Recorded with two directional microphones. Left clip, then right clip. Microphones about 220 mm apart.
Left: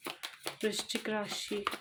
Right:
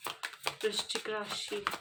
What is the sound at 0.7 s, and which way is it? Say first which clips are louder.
Speech: even; 20° left (ahead or behind).